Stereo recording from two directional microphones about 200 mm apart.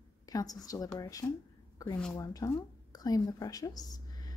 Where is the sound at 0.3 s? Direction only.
20° left (ahead or behind).